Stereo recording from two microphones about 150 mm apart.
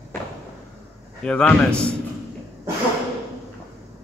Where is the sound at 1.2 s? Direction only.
10° left (ahead or behind).